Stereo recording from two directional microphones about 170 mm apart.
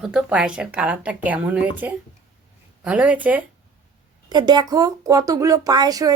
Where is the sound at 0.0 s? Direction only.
5° right (ahead or behind).